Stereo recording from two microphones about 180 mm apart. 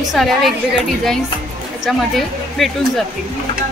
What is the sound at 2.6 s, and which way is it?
Speech, centre (ahead or behind).